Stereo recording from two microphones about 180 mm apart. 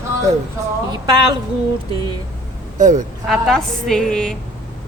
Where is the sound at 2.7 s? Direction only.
45° right (ahead or behind).